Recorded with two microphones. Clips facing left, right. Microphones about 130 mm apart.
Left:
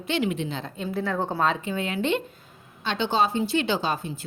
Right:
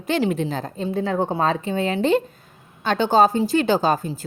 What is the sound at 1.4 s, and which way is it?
A woman's voice, 35° right (ahead or behind).